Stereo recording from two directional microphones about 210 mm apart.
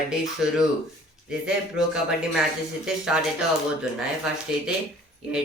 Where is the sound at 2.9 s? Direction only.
Centre (ahead or behind).